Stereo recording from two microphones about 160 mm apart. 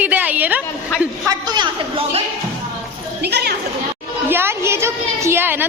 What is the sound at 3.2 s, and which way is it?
Chatter, 90° right.